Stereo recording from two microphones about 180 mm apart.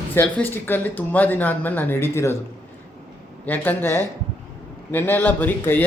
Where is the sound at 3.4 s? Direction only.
10° left (ahead or behind).